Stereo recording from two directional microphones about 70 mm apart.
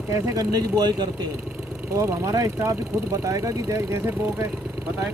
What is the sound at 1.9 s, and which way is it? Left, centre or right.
Speech, right.